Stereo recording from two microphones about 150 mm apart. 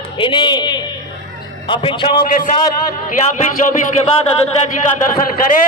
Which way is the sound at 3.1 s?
55° left (ahead or behind).